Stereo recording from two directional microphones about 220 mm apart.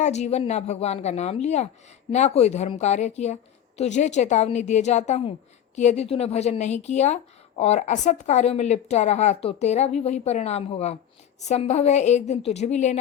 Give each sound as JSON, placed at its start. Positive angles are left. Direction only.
{"t": 0.0, "sound": "a woman's voice", "side_deg": 30}